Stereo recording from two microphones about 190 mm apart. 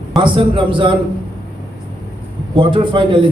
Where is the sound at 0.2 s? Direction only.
25° right (ahead or behind).